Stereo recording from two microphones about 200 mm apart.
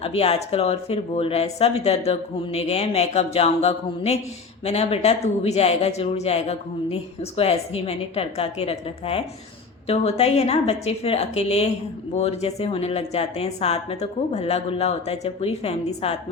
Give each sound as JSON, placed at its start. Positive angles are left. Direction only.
{"t": 0.0, "sound": "speech", "side_deg": 30}